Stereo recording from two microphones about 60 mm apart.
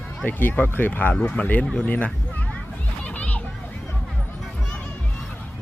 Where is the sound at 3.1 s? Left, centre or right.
Left.